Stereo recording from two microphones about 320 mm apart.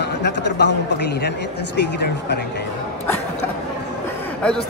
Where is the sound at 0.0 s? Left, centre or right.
Left.